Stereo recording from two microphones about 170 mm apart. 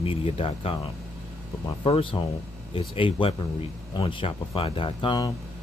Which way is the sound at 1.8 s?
30° left (ahead or behind).